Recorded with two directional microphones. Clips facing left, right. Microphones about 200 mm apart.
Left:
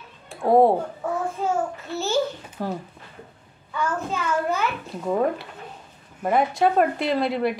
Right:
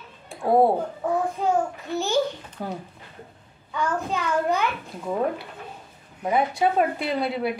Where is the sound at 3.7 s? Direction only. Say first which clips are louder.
Even; 15° right (ahead or behind).